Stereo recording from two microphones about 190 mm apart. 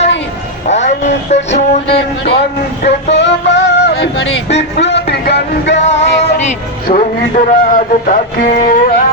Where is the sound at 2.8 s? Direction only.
65° left (ahead or behind).